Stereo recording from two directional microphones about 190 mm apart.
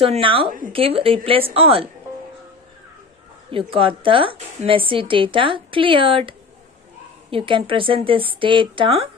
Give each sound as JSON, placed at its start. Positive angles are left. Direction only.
{"t": 0.0, "sound": "a woman's voice", "side_deg": -30}
{"t": 3.7, "sound": "a woman's voice", "side_deg": -30}